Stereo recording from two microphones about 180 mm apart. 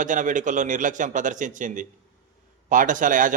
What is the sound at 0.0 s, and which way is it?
A man's voice, 45° right (ahead or behind).